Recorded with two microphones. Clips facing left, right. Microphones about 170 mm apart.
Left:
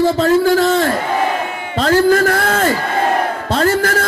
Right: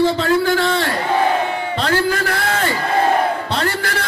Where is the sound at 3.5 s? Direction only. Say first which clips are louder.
Left 6 dB; 45° left (ahead or behind).